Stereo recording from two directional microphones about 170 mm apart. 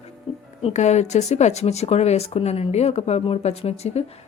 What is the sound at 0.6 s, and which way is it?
Speech, 40° left (ahead or behind).